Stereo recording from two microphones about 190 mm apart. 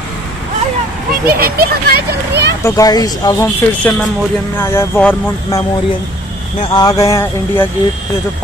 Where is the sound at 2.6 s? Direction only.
20° left (ahead or behind).